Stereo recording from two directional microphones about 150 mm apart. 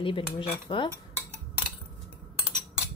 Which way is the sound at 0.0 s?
35° left (ahead or behind).